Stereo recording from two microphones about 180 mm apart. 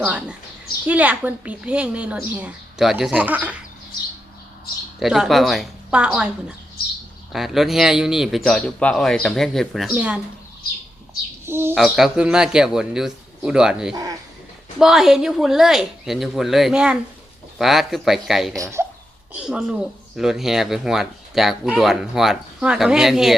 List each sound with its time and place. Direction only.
0.0 s a woman's voice: 5° right (ahead or behind)
4.9 s speech: centre (ahead or behind)
7.3 s speech: centre (ahead or behind)
11.4 s speech: 15° right (ahead or behind)
11.7 s speech: centre (ahead or behind)
13.9 s a man's voice: 20° right (ahead or behind)
14.8 s speech: centre (ahead or behind)
18.5 s a woman's voice: 15° right (ahead or behind)
19.3 s speech: 5° right (ahead or behind)